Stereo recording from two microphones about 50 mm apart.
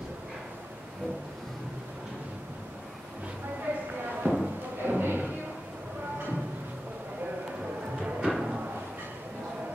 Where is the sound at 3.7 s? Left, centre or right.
Right.